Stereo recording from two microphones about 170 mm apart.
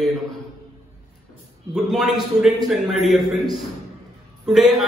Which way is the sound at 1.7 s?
Centre (ahead or behind).